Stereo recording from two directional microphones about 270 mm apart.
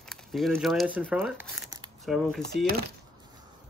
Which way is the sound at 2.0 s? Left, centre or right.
Centre.